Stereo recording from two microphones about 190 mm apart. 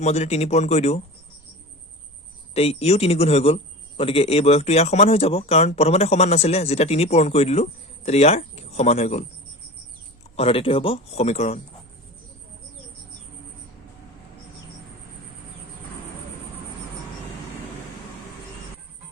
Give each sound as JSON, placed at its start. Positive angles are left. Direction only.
{"t": 0.0, "sound": "a man's voice", "side_deg": 35}
{"t": 2.6, "sound": "a man's voice", "side_deg": 35}
{"t": 10.3, "sound": "a man's voice", "side_deg": 30}